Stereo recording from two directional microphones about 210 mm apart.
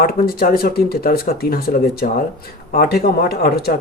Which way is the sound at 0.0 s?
45° left (ahead or behind).